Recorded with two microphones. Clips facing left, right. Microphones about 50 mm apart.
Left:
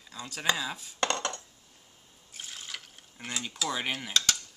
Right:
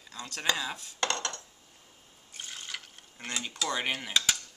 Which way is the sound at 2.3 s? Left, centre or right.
Centre.